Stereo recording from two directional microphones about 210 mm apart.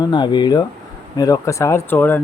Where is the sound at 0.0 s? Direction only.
20° left (ahead or behind).